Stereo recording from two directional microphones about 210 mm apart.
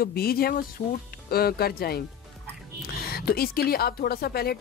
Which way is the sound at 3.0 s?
45° left (ahead or behind).